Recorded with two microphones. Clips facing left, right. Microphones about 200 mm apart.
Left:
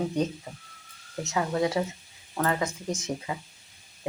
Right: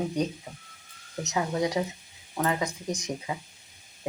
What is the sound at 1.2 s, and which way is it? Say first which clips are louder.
Speech: left 1 dB; 20° right (ahead or behind).